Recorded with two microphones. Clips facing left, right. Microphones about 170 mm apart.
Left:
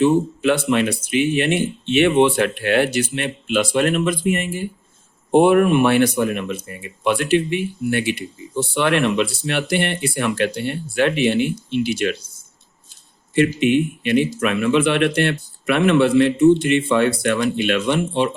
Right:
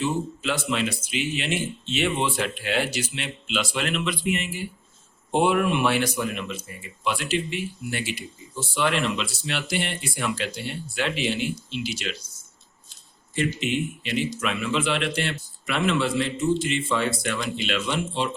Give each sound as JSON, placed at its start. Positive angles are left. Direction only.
{"t": 0.0, "sound": "speech", "side_deg": 60}
{"t": 13.3, "sound": "speech", "side_deg": 60}